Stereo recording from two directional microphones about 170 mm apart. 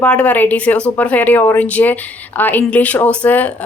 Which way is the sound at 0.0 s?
5° left (ahead or behind).